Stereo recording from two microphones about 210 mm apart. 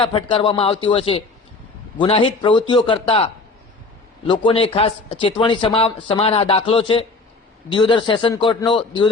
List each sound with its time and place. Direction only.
0.0 s speech: 25° left (ahead or behind)